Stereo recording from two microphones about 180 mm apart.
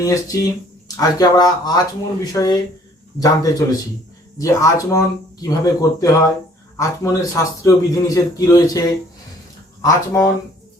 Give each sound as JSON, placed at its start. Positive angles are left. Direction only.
{"t": 0.0, "sound": "a man's voice", "side_deg": 20}
{"t": 9.8, "sound": "speech", "side_deg": 15}